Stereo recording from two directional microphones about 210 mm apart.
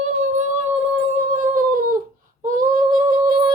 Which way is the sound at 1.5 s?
40° right (ahead or behind).